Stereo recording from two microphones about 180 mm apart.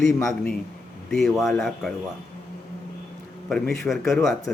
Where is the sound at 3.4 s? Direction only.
Centre (ahead or behind).